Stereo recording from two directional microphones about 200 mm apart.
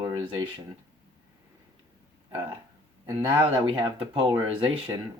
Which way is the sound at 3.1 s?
25° right (ahead or behind).